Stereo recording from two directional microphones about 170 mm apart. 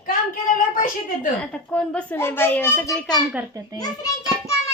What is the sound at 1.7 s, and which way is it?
A child's voice, 5° left (ahead or behind).